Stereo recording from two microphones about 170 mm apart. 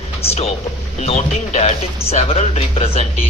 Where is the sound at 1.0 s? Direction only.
40° left (ahead or behind).